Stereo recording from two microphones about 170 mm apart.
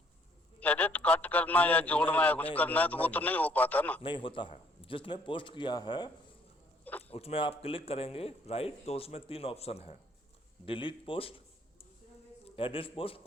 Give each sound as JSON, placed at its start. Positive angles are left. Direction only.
{"t": 0.6, "sound": "a man's voice", "side_deg": 10}
{"t": 4.0, "sound": "a man's voice", "side_deg": 30}
{"t": 7.1, "sound": "speech", "side_deg": 35}
{"t": 12.5, "sound": "speech", "side_deg": 30}